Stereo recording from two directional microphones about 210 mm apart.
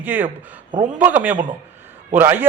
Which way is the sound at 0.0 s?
10° right (ahead or behind).